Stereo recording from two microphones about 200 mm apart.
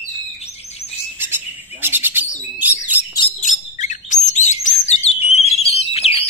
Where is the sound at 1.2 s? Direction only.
10° right (ahead or behind).